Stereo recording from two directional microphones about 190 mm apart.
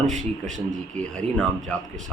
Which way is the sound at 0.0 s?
40° right (ahead or behind).